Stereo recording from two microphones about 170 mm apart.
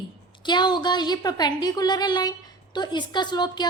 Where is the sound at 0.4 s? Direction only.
25° left (ahead or behind).